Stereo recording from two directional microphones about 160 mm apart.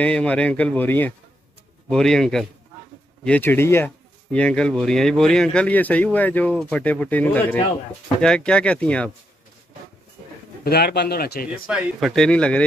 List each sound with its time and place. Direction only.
0.0 s speech: 10° left (ahead or behind)
10.6 s speech: 85° left
11.7 s speech: centre (ahead or behind)